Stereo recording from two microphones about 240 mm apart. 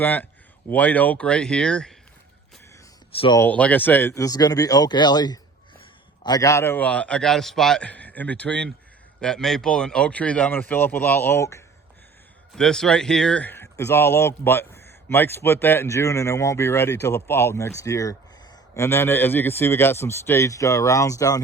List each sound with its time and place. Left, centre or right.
0.0 s a man's voice: centre
3.2 s speech: centre
3.4 s a man's voice: centre